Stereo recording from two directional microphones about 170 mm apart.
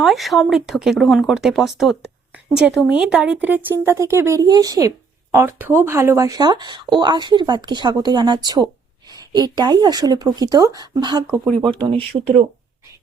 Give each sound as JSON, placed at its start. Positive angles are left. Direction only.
{"t": 0.0, "sound": "speech", "side_deg": 0}